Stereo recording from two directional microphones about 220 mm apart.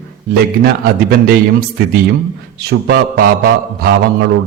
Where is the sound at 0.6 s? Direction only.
45° right (ahead or behind).